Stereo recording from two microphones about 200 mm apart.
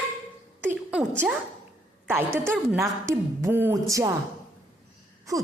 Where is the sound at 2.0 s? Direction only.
10° right (ahead or behind).